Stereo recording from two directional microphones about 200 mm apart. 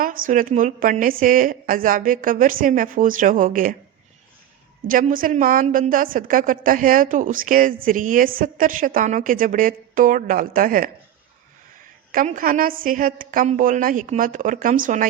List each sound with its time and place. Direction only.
0.0 s a woman's voice: 45° right (ahead or behind)
4.9 s a woman's voice: 45° right (ahead or behind)
12.1 s a woman's voice: 40° right (ahead or behind)